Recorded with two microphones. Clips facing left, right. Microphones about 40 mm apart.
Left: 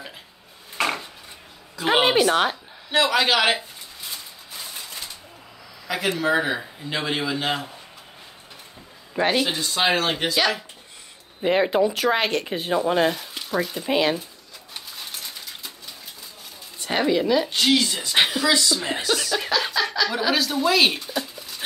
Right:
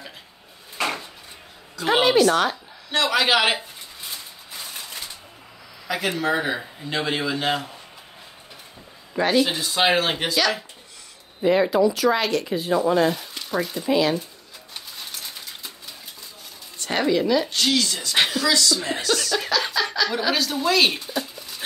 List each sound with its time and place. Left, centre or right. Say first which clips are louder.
0.7 s a sound: left 2 dB; centre
1.8 s a sound: even; left
2.2 s speech: right 1 dB; left
2.9 s speech: even; centre
4.1 s a sound: even; centre
5.9 s speech: left 1 dB; centre
9.1 s speech: even; left
9.5 s speech: right 1 dB; centre
11.4 s speech: right 1 dB; left
13.3 s speech: even; centre
13.8 s speech: right 1 dB; left
14.7 s pigeon: even; centre
15.3 s bird: even; centre
16.7 s speech: even; centre